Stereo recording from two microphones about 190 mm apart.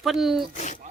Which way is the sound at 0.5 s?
40° left (ahead or behind).